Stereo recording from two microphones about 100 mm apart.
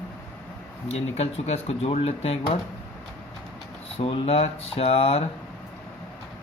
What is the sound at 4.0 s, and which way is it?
Speech, 70° left (ahead or behind).